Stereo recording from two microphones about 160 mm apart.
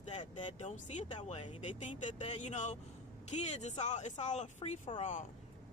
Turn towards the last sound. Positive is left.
turn(degrees=50)  # may be behind; listen again after turning